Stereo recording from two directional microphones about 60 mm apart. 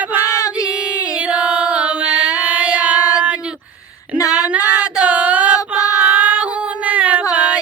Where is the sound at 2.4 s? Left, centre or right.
Right.